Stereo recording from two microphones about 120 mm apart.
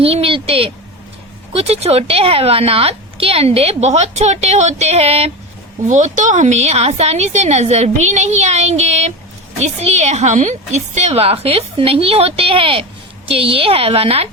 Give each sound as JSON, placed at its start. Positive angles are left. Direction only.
{"t": 0.0, "sound": "a woman's voice", "side_deg": -55}
{"t": 5.9, "sound": "a woman's voice", "side_deg": -85}